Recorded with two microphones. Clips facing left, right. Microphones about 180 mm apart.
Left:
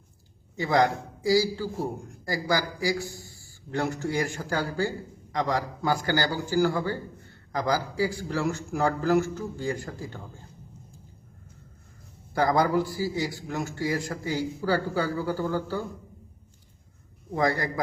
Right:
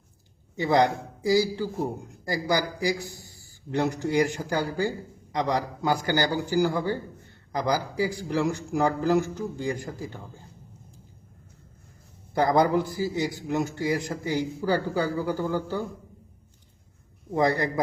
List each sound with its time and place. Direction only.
0.5 s a man's voice: 20° right (ahead or behind)
12.3 s a man's voice: 20° right (ahead or behind)
17.3 s a man's voice: 20° right (ahead or behind)